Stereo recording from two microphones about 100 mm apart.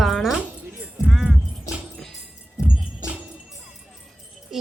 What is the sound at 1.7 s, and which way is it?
Music, 35° left (ahead or behind).